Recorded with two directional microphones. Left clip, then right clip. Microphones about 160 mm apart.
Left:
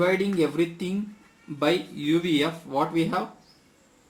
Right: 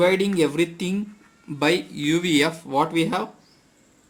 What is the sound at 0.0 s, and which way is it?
Speech, 60° right (ahead or behind).